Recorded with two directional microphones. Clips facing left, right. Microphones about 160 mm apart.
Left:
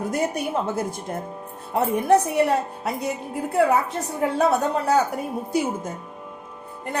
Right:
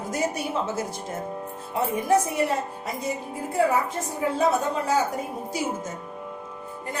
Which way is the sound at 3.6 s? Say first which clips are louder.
Left 3 dB; 65° left (ahead or behind).